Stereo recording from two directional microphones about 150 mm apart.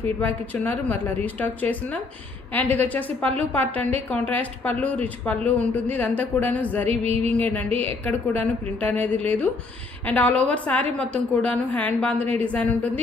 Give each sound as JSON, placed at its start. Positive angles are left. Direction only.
{"t": 0.0, "sound": "a woman's voice", "side_deg": 10}
{"t": 7.1, "sound": "music", "side_deg": -45}
{"t": 7.3, "sound": "a woman's voice", "side_deg": 10}